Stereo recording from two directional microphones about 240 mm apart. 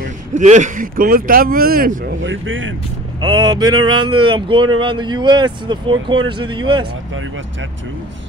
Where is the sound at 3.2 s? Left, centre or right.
Centre.